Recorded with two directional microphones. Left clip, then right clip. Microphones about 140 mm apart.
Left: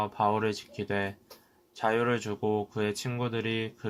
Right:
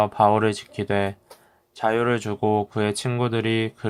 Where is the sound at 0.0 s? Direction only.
40° right (ahead or behind).